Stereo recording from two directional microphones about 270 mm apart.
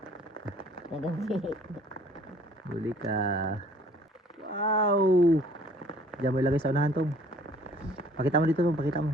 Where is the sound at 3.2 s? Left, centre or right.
Right.